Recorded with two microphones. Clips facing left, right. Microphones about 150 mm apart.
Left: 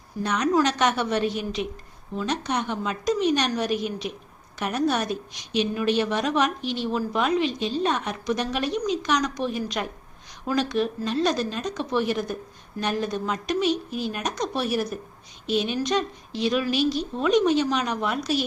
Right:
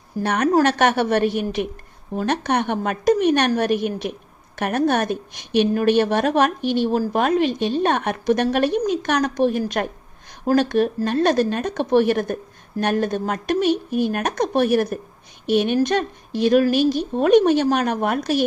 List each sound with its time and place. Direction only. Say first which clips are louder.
0.2 s a woman's voice: right 4 dB; 55° right (ahead or behind)